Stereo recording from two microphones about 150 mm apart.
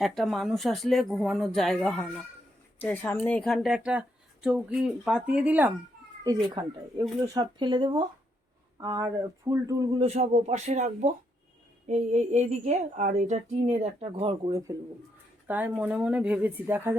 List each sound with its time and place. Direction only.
0.0 s speech: centre (ahead or behind)
6.2 s speech: 25° right (ahead or behind)
10.0 s speech: 50° right (ahead or behind)
14.4 s speech: 20° right (ahead or behind)